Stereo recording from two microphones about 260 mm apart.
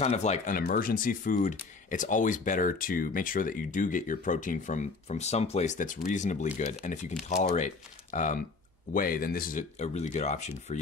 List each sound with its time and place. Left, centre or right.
0.0 s speech: left